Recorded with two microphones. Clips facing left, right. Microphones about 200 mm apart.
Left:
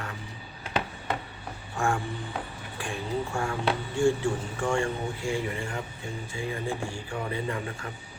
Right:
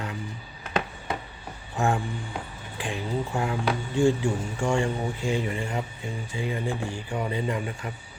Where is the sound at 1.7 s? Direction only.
20° right (ahead or behind).